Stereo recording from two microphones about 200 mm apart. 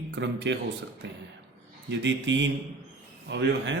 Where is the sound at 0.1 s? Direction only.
60° right (ahead or behind).